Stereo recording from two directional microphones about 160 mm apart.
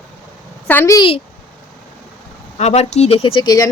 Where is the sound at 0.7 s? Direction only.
10° left (ahead or behind).